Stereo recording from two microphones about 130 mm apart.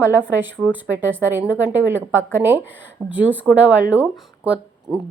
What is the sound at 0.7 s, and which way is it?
A woman's voice, 15° right (ahead or behind).